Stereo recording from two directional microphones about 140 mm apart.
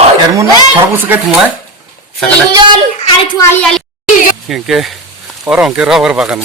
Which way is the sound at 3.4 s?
15° left (ahead or behind).